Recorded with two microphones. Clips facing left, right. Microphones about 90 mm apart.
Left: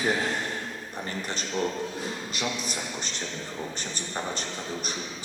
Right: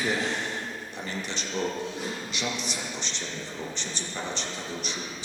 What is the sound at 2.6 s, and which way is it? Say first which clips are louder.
A man's voice: left 1 dB; 45° left (ahead or behind).